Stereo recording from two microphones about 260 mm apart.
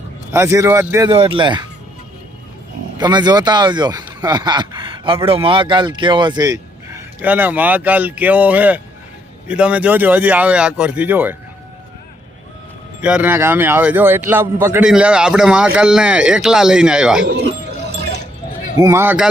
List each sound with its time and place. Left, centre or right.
0.3 s speech: centre
3.0 s a man's voice: centre
13.0 s a man's voice: centre
18.8 s speech: centre